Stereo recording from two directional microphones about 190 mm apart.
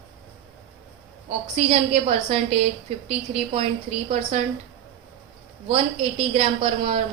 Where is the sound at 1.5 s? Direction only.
35° right (ahead or behind).